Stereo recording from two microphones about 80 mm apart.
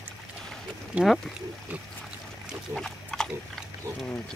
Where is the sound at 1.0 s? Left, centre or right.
Centre.